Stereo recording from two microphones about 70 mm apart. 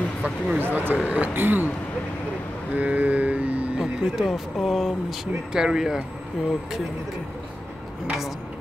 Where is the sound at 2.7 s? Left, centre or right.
Right.